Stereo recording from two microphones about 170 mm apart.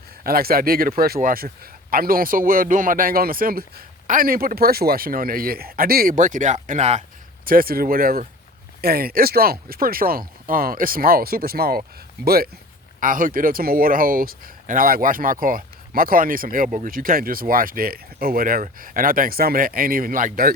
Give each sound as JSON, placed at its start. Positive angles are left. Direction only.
{"t": 0.3, "sound": "speech", "side_deg": -60}
{"t": 7.4, "sound": "speech", "side_deg": -60}
{"t": 13.0, "sound": "speech", "side_deg": -50}